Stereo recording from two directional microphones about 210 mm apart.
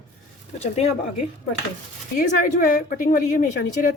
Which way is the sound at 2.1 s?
40° left (ahead or behind).